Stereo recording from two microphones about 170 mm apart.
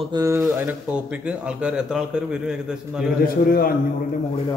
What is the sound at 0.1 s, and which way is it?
Speech, 15° right (ahead or behind).